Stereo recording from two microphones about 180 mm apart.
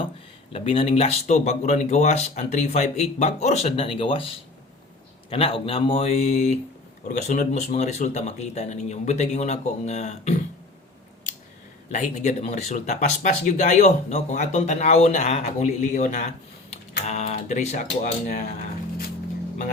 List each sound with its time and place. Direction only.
0.5 s speech: 30° left (ahead or behind)
5.3 s speech: 30° left (ahead or behind)
11.9 s speech: 40° left (ahead or behind)